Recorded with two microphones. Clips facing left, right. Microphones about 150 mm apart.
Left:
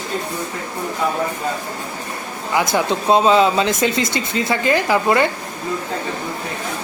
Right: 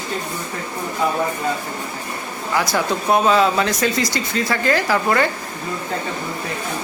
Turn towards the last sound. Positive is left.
turn(degrees=20)  # may be behind; listen again after turning